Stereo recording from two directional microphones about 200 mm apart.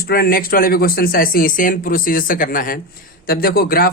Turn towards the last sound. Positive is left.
turn(degrees=50)  # may be behind; listen again after turning